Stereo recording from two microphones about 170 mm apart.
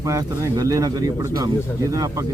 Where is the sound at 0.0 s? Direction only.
20° right (ahead or behind).